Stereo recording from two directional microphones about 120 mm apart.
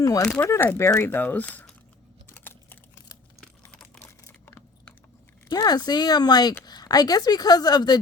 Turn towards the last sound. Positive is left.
turn(degrees=35)  # may be behind; listen again after turning